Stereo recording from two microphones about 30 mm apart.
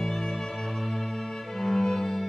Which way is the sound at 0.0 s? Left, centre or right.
Centre.